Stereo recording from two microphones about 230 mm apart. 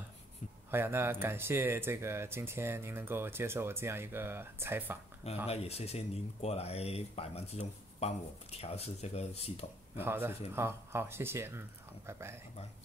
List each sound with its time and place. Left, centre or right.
0.7 s speech: centre
5.5 s speech: left
9.9 s speech: centre